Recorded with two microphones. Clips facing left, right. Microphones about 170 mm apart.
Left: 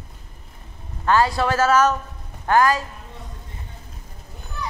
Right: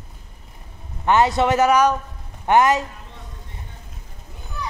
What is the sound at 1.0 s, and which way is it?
A man's voice, 20° right (ahead or behind).